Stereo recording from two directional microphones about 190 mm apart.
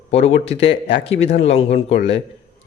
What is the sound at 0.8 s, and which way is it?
Speech, 70° left (ahead or behind).